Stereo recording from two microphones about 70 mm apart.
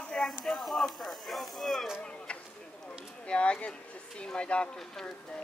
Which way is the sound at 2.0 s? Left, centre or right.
Centre.